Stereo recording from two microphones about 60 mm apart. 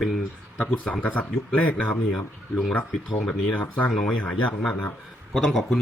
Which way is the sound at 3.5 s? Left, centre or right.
Left.